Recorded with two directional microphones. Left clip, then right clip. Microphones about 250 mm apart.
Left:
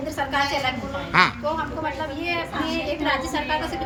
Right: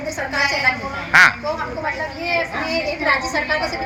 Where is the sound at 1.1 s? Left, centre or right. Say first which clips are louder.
Right 7 dB; centre.